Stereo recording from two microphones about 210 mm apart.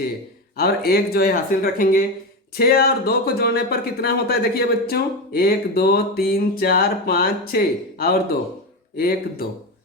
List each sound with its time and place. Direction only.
0.5 s speech: 45° left (ahead or behind)